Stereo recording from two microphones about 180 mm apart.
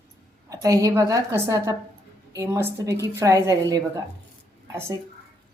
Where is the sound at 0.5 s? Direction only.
20° right (ahead or behind).